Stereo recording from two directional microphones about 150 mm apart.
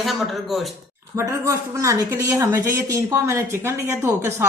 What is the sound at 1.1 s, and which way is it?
Speech, 20° right (ahead or behind).